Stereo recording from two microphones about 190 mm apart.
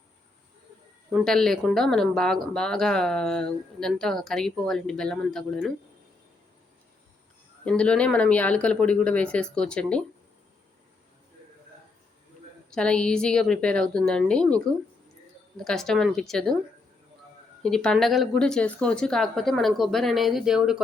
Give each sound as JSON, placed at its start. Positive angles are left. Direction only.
{"t": 1.1, "sound": "speech", "side_deg": 0}
{"t": 7.6, "sound": "speech", "side_deg": 5}
{"t": 12.7, "sound": "speech", "side_deg": 5}
{"t": 17.6, "sound": "speech", "side_deg": 5}